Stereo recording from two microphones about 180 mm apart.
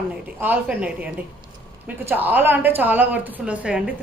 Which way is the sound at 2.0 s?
10° right (ahead or behind).